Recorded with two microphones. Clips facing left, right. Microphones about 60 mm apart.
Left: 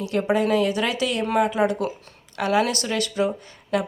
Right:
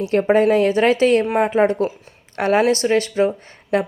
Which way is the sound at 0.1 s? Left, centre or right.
Right.